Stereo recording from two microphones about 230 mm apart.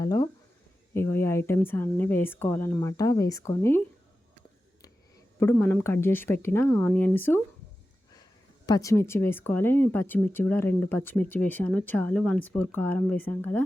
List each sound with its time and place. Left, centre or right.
0.0 s speech: centre
5.4 s speech: centre
8.6 s speech: centre